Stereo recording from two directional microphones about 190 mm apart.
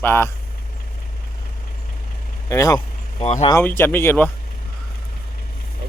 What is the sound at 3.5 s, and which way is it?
Speech, 10° left (ahead or behind).